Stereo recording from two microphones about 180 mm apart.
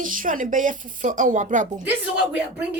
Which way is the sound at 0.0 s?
50° right (ahead or behind).